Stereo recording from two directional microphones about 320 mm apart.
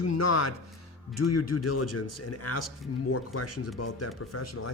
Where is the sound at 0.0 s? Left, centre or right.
Left.